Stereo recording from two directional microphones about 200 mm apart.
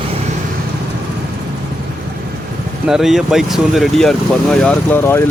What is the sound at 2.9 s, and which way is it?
Speech, centre (ahead or behind).